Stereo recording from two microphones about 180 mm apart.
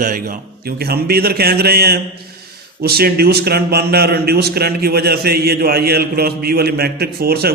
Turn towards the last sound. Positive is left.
turn(degrees=-60)  # may be behind; listen again after turning